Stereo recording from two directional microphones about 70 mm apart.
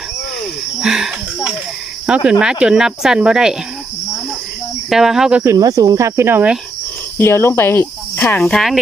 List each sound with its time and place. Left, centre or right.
0.8 s a sound: centre
2.0 s speech: centre
4.9 s speech: centre
5.5 s speech: right
6.0 s speech: right
7.2 s cricket: left
8.4 s speech: centre